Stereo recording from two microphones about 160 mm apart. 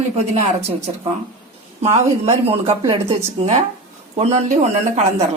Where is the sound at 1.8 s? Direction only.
40° right (ahead or behind).